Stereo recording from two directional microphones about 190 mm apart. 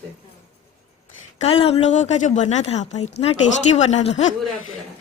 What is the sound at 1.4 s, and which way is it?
A woman's voice, 30° left (ahead or behind).